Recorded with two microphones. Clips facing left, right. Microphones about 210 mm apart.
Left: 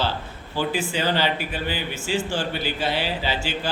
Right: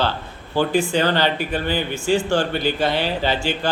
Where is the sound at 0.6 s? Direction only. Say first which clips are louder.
Right 6 dB; 5° left (ahead or behind).